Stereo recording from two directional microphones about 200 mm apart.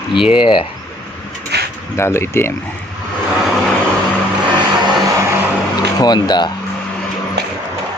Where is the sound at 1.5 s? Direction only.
55° right (ahead or behind).